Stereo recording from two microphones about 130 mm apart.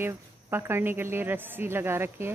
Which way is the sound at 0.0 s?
15° right (ahead or behind).